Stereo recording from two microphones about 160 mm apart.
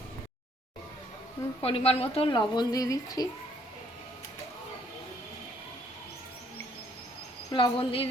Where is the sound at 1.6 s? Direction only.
35° left (ahead or behind); by 3.2 s 20° left (ahead or behind).